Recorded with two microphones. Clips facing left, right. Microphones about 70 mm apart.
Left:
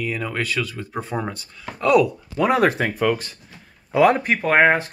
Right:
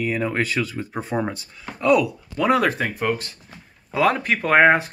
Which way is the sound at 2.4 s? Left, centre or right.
Left.